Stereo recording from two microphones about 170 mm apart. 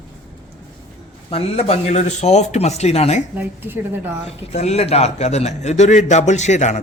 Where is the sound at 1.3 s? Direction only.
35° left (ahead or behind).